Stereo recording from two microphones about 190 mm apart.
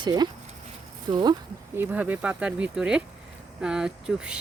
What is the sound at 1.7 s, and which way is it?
Speech, 10° right (ahead or behind).